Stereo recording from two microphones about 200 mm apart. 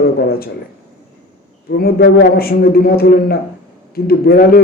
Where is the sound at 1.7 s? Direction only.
55° left (ahead or behind).